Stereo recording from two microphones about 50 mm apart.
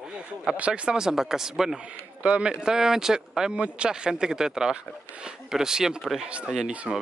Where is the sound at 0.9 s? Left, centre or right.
Centre.